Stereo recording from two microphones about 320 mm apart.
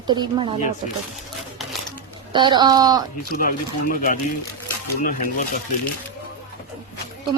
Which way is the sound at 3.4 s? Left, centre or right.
Left.